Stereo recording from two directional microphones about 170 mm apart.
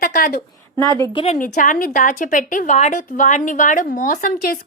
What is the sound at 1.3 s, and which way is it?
A woman's voice, 50° left (ahead or behind).